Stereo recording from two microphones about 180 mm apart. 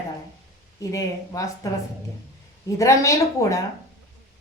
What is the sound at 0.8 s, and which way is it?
Speech, 20° left (ahead or behind).